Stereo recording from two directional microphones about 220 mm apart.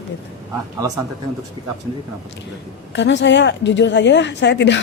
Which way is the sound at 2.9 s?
55° left (ahead or behind).